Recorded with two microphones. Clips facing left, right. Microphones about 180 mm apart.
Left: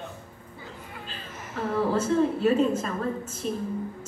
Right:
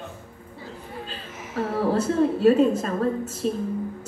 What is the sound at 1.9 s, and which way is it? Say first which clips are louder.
Speech: right 2 dB; 35° right (ahead or behind).